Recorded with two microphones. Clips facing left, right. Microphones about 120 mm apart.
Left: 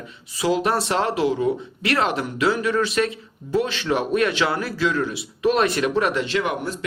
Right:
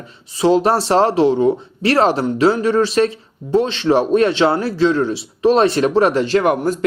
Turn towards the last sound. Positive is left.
turn(degrees=-45)  # may be behind; listen again after turning